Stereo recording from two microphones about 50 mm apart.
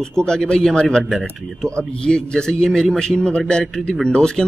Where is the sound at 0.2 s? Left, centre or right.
Centre.